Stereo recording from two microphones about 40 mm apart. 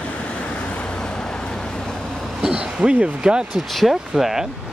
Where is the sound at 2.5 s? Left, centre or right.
Right.